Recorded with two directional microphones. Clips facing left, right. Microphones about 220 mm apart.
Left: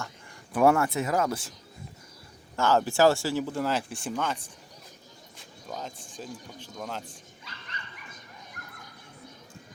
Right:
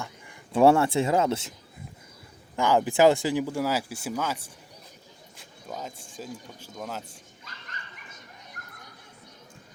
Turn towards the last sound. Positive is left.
turn(degrees=-45)  # may be behind; listen again after turning